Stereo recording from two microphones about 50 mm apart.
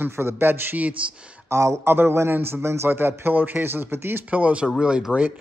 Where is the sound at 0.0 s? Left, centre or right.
Right.